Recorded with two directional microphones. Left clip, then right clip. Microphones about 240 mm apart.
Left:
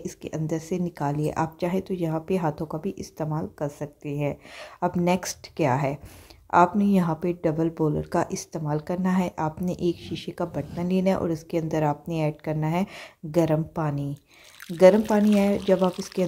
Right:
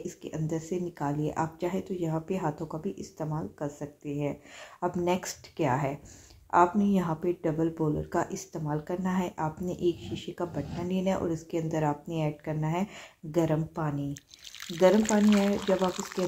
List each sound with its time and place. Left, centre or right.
0.0 s speech: left